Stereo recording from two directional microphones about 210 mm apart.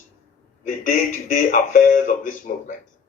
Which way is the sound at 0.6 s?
40° left (ahead or behind).